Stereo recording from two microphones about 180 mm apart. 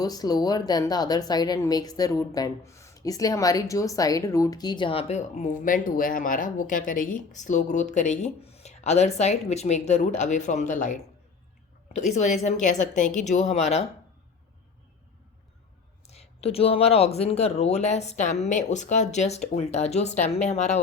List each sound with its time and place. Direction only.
0.0 s a woman's voice: 20° left (ahead or behind); by 10.9 s 45° left (ahead or behind)
11.9 s a woman's voice: 40° left (ahead or behind)
16.0 s a woman's voice: 35° left (ahead or behind)